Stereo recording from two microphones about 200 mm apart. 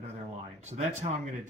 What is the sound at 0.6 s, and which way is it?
Speech, 35° right (ahead or behind).